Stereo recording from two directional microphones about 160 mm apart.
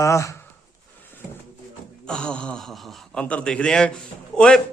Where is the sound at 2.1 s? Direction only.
5° left (ahead or behind).